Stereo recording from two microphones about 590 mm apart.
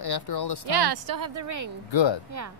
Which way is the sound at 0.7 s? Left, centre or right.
Right.